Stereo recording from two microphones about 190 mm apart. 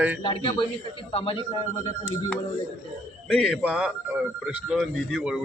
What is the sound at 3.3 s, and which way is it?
A man's voice, 5° left (ahead or behind).